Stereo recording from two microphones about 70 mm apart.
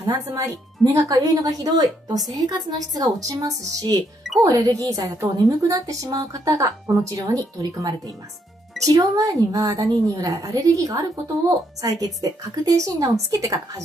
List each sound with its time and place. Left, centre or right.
0.0 s a woman's voice: right
8.8 s a woman's voice: right